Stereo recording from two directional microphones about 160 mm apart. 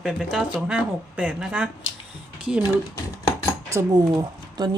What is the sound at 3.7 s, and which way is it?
Speech, 20° right (ahead or behind).